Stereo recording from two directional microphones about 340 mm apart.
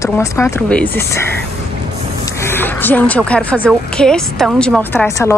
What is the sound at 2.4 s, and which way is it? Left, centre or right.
Speech, centre.